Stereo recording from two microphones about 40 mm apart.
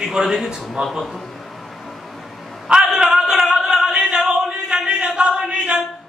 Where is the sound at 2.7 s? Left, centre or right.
Centre.